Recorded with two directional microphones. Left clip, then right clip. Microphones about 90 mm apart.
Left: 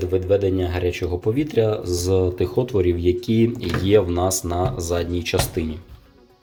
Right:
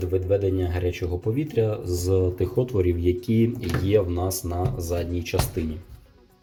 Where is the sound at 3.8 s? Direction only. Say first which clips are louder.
Left 5 dB; 35° left (ahead or behind).